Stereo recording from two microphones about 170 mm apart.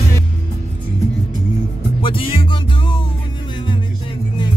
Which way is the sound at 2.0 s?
30° left (ahead or behind).